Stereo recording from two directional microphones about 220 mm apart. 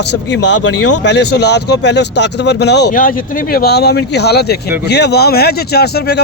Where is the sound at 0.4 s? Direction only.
55° left (ahead or behind).